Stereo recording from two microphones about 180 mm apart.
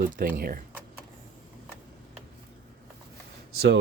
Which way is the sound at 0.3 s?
55° right (ahead or behind).